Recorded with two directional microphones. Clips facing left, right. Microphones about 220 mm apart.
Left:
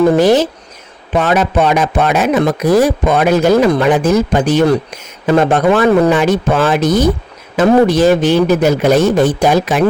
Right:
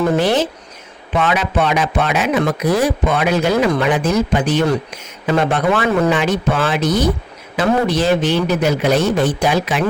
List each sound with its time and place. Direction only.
0.2 s speech: 40° left (ahead or behind)